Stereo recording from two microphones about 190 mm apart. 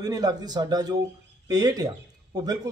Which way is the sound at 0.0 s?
20° right (ahead or behind).